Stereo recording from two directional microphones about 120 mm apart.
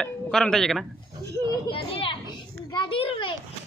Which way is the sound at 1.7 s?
50° left (ahead or behind).